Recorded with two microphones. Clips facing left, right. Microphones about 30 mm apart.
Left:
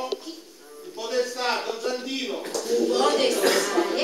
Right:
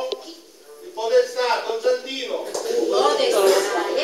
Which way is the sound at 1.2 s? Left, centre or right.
Centre.